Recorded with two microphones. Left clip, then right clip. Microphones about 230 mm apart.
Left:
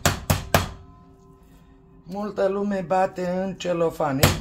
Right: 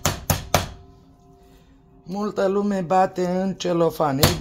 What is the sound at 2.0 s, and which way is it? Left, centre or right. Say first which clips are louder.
Speech: right 1 dB; right.